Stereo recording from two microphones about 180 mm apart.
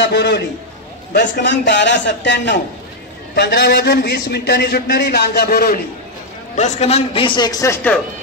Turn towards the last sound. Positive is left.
turn(degrees=10)  # may be behind; listen again after turning